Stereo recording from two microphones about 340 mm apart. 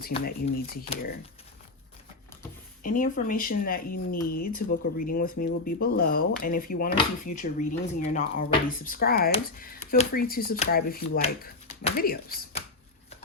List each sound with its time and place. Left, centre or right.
0.0 s speech: left
2.8 s speech: left
7.3 s speech: left
7.7 s speech: left